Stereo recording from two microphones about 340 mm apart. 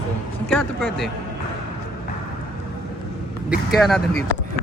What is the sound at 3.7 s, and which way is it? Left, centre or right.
Speech, centre.